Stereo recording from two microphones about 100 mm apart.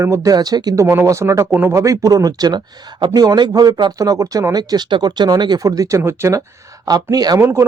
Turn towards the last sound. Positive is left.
turn(degrees=-25)  # may be behind; listen again after turning